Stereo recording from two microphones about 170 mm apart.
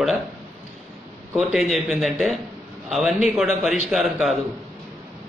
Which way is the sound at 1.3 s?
5° right (ahead or behind).